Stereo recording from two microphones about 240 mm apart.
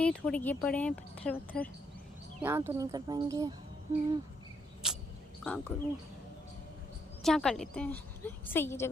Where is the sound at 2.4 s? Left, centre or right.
Centre.